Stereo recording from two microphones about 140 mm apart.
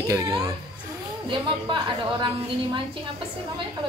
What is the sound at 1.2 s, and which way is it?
A woman's voice, 35° right (ahead or behind).